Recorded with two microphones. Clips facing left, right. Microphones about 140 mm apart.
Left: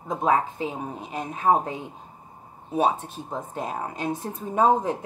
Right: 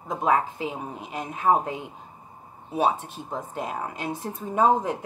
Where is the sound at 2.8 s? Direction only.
45° left (ahead or behind).